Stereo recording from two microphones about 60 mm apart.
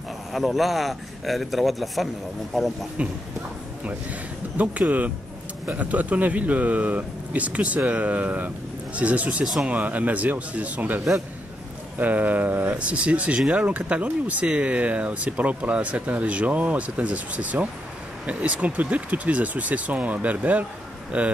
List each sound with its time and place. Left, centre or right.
0.3 s a man's voice: centre
3.8 s speech: right
12.0 s speech: right